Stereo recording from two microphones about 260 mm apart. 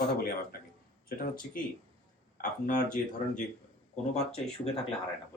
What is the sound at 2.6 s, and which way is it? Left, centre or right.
Speech, left.